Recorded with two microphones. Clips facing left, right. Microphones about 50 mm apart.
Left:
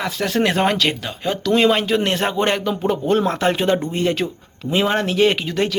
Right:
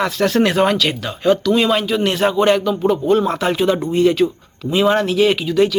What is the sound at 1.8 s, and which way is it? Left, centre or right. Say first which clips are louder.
Speech: even; left.